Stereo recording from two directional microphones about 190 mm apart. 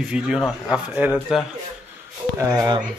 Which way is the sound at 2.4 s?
20° right (ahead or behind).